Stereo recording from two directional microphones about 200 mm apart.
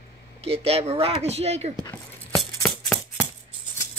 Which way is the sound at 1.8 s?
5° left (ahead or behind).